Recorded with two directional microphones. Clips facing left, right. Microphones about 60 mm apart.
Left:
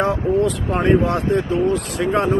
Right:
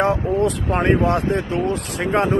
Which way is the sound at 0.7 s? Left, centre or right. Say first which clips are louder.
Left 1 dB; right.